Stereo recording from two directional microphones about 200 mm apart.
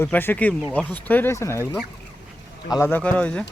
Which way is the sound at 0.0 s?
10° left (ahead or behind).